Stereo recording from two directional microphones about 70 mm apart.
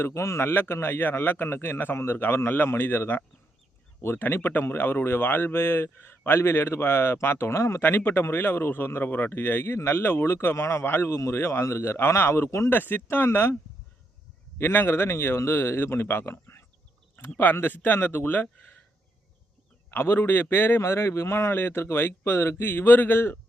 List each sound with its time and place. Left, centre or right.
0.1 s speech: left
14.6 s speech: left
19.9 s speech: left